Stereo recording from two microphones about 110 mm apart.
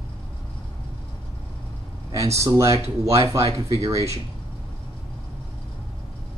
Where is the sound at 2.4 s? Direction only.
30° right (ahead or behind).